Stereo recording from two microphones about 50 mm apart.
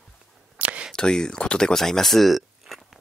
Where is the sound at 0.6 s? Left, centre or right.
Right.